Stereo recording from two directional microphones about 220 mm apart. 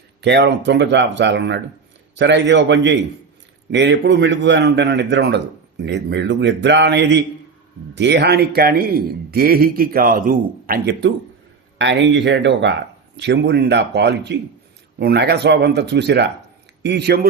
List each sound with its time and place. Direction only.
0.2 s a man's voice: 50° right (ahead or behind)
11.8 s a man's voice: 55° right (ahead or behind)